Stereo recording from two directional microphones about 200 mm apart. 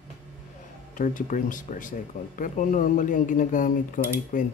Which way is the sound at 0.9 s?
40° left (ahead or behind).